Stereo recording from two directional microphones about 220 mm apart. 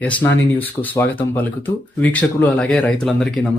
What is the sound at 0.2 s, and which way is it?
Speech, 10° left (ahead or behind).